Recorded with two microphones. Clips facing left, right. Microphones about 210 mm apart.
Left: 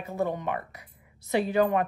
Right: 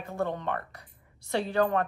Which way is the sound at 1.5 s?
15° left (ahead or behind).